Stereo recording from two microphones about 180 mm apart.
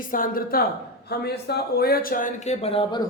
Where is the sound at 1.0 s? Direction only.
65° left (ahead or behind); by 3.0 s 30° left (ahead or behind).